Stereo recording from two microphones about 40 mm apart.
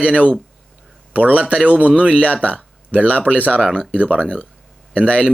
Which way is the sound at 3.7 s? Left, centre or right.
Centre.